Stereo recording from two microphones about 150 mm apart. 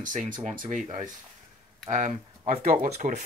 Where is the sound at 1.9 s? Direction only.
50° right (ahead or behind).